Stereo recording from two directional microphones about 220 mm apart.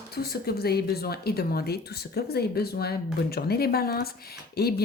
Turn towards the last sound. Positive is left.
turn(degrees=45)  # may be behind; listen again after turning